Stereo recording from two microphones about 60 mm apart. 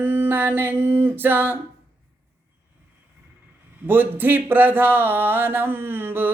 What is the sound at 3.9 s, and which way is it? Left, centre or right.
Music, right.